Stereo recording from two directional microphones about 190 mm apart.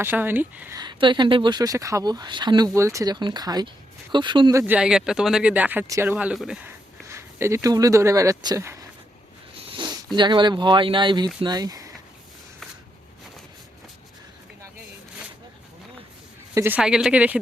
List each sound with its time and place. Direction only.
0.0 s speech: 10° right (ahead or behind)
0.8 s speech: 25° right (ahead or behind)
4.6 s speech: 5° right (ahead or behind)
6.7 s speech: 15° right (ahead or behind)
9.6 s a sound: 30° right (ahead or behind)
10.2 s speech: 25° right (ahead or behind)
16.6 s speech: 10° right (ahead or behind)